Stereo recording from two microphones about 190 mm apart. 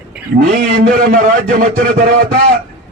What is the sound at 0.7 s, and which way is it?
A man's voice, 50° right (ahead or behind).